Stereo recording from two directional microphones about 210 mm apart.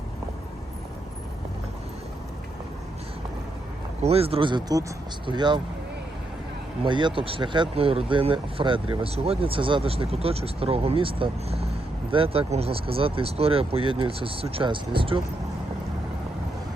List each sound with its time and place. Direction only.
4.0 s speech: 30° right (ahead or behind)
6.8 s speech: 20° right (ahead or behind)